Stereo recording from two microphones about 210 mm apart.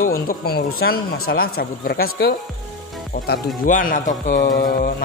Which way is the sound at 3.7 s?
40° left (ahead or behind).